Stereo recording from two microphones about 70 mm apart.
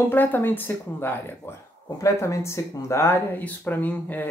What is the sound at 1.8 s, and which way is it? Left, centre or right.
Speech, left.